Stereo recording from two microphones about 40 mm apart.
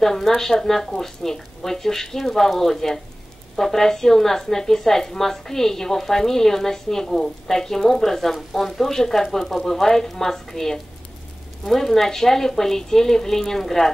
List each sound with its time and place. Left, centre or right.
0.0 s a woman's voice: centre